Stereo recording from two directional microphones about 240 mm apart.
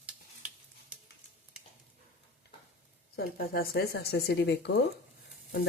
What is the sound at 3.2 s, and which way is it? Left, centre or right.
Speech, left.